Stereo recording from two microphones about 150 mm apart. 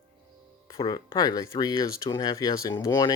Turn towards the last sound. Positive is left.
turn(degrees=25)  # may be behind; listen again after turning